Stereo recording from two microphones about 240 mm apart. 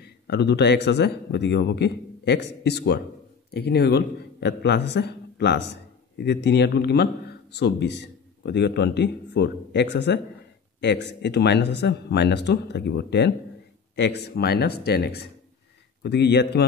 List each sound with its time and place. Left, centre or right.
0.0 s a man's voice: left